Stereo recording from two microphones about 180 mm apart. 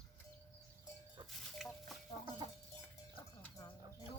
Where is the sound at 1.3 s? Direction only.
Centre (ahead or behind).